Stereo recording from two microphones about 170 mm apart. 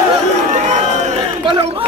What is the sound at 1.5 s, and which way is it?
Speech, 30° right (ahead or behind).